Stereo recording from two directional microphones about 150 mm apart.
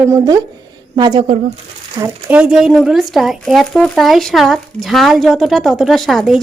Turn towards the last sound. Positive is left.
turn(degrees=0)  # may be behind; listen again after turning